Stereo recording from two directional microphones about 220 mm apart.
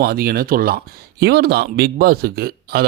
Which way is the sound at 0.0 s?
40° right (ahead or behind).